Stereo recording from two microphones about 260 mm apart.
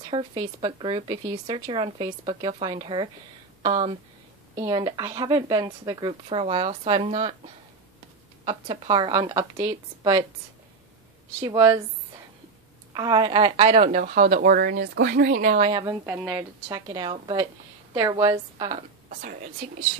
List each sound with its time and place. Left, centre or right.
0.1 s speech: centre
8.5 s speech: centre
11.4 s speech: centre
12.9 s speech: centre
15.7 s speech: centre